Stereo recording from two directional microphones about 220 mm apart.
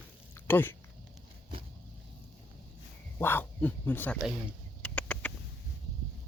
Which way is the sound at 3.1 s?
10° left (ahead or behind).